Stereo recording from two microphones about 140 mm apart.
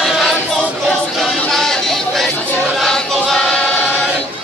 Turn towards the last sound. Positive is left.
turn(degrees=5)  # may be behind; listen again after turning